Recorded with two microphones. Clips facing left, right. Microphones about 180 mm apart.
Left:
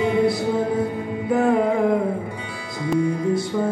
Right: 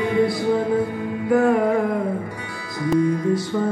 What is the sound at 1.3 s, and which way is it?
Music, 20° left (ahead or behind).